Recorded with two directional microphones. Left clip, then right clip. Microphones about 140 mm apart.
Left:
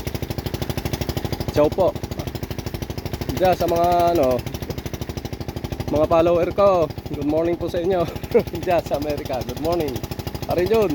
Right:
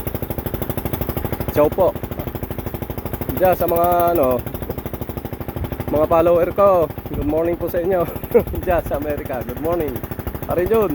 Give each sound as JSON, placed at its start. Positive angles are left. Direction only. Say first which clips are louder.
{"t": 1.5, "sound": "speech", "louder": "right 2 dB", "side_deg": 15}
{"t": 3.4, "sound": "speech", "louder": "right 2 dB", "side_deg": 20}
{"t": 5.9, "sound": "speech", "louder": "right 2 dB", "side_deg": 20}